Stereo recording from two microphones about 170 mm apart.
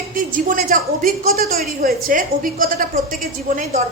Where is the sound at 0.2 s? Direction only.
50° right (ahead or behind).